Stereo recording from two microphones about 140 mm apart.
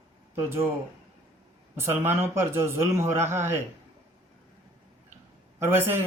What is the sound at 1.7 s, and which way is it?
A man's voice, 15° right (ahead or behind).